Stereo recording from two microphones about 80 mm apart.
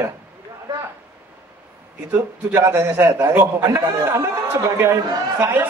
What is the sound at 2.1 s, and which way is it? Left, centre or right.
Speech, right.